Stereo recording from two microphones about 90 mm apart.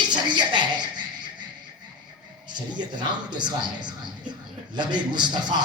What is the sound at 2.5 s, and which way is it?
Speech, 55° right (ahead or behind).